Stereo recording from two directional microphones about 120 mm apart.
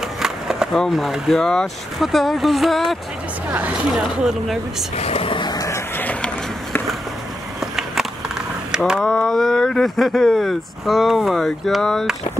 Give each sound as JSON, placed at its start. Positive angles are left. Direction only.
{"t": 0.2, "sound": "speech", "side_deg": -5}
{"t": 3.5, "sound": "speech", "side_deg": -10}
{"t": 4.9, "sound": "vehicle", "side_deg": 55}
{"t": 5.9, "sound": "a sound", "side_deg": 15}
{"t": 7.6, "sound": "a sound", "side_deg": -5}
{"t": 8.7, "sound": "speech", "side_deg": -5}
{"t": 9.0, "sound": "speech", "side_deg": 5}